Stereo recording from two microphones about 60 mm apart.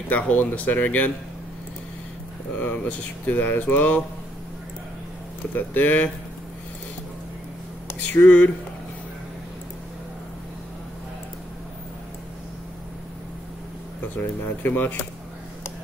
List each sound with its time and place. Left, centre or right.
0.1 s speech: left
2.5 s speech: left
5.5 s speech: left
8.0 s speech: left
14.0 s speech: left